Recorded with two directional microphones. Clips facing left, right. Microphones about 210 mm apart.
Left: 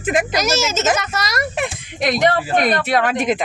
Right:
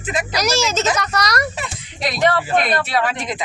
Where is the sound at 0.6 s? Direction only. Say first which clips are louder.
Left 1 dB; 5° left (ahead or behind).